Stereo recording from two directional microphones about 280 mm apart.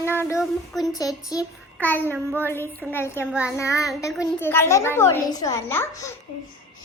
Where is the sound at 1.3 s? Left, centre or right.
Centre.